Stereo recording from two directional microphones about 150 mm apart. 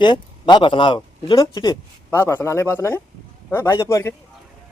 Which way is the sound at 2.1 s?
15° left (ahead or behind).